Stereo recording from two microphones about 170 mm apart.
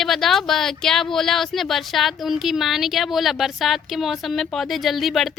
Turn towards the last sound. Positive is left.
turn(degrees=0)  # may be behind; listen again after turning